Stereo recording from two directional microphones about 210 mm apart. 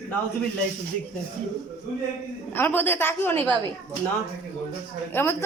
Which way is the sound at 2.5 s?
10° left (ahead or behind).